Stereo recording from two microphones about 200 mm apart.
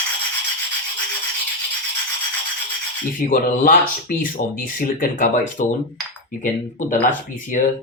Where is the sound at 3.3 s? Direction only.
45° left (ahead or behind).